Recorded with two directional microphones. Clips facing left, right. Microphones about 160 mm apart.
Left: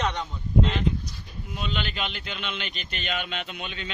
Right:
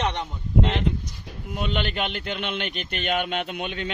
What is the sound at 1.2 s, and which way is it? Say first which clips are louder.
Speech: right 4 dB; 60° right (ahead or behind).